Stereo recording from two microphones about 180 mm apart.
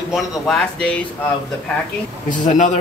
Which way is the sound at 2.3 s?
45° left (ahead or behind).